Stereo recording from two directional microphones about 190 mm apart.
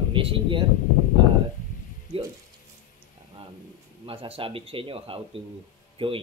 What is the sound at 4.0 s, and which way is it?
A man's voice, 30° right (ahead or behind).